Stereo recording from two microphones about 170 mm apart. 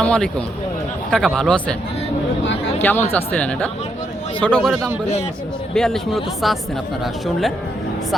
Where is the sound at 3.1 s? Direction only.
10° left (ahead or behind).